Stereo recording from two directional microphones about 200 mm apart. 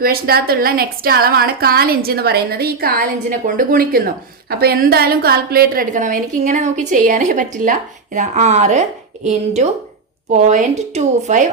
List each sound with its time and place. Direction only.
0.0 s a woman's voice: 50° right (ahead or behind)